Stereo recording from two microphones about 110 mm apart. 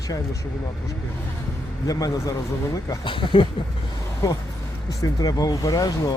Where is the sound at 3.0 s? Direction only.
50° left (ahead or behind).